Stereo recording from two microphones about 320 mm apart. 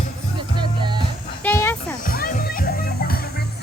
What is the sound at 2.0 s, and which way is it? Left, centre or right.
Music, left.